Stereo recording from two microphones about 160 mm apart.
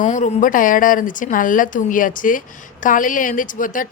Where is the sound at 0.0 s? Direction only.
50° left (ahead or behind).